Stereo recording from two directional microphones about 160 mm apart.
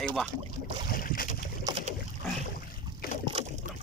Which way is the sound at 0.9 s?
60° left (ahead or behind).